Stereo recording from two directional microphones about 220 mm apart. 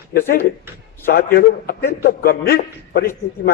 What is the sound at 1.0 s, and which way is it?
A man's voice, 40° left (ahead or behind).